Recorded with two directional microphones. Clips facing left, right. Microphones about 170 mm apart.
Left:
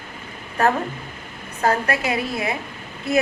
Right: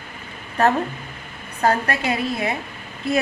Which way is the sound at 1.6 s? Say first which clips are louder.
Even; 30° right (ahead or behind).